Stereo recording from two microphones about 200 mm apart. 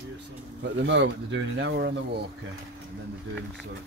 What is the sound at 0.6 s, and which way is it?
Speech, 60° right (ahead or behind).